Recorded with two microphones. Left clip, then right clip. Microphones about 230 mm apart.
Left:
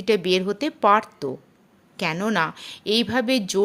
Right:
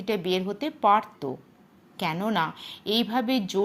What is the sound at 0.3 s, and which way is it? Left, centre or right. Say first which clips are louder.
Speech: left 5 dB; left.